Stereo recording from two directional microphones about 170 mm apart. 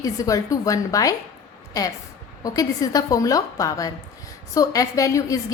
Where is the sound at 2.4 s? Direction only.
20° left (ahead or behind).